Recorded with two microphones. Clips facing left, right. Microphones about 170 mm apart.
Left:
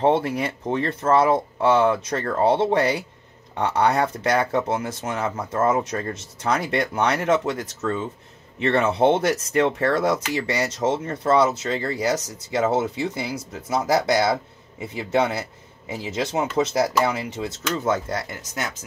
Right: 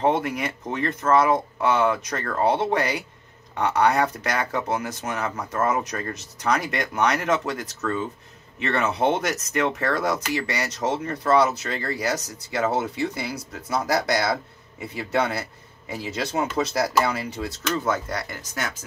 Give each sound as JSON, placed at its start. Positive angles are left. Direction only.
{"t": 0.0, "sound": "speech", "side_deg": 30}